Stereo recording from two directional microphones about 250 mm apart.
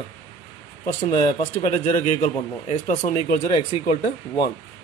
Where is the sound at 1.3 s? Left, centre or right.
Left.